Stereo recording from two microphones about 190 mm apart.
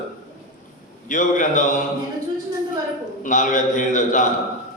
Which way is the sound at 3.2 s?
40° left (ahead or behind).